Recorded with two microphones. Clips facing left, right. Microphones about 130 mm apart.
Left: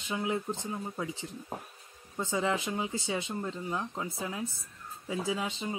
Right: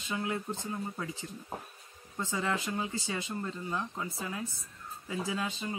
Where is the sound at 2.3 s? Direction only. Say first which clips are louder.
Left 3 dB; 20° left (ahead or behind).